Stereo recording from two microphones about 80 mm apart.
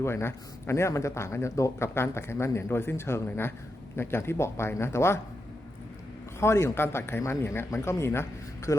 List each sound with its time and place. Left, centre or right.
0.0 s speech: left
6.4 s speech: left